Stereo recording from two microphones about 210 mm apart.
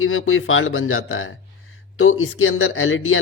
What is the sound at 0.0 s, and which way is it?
A man's voice, 75° left (ahead or behind).